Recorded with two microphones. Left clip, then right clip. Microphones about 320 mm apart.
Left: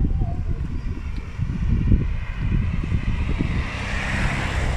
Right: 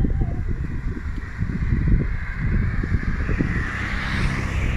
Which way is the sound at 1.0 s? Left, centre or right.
Centre.